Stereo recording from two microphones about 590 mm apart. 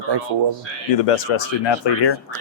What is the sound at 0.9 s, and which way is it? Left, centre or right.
Speech, left.